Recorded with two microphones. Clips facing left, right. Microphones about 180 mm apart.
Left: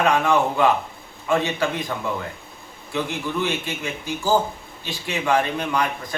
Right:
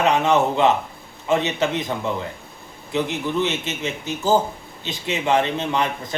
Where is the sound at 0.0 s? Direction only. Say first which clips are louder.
Right 1 dB; 20° right (ahead or behind).